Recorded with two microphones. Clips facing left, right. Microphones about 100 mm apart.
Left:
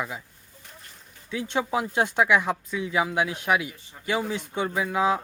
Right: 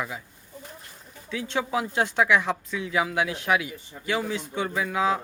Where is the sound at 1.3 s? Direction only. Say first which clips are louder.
Left 1 dB; 20° left (ahead or behind).